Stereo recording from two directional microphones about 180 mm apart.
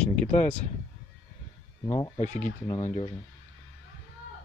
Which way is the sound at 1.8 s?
20° left (ahead or behind).